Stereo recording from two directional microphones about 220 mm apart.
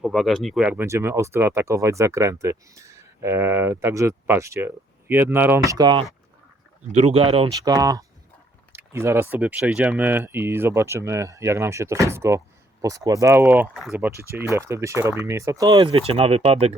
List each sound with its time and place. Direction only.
0.0 s speech: centre (ahead or behind); by 16.7 s 25° right (ahead or behind)